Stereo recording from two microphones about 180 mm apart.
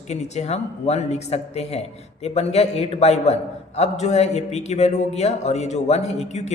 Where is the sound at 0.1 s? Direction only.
40° left (ahead or behind).